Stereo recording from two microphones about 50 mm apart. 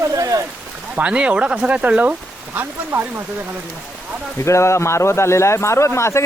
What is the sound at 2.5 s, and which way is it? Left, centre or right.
Speech, right.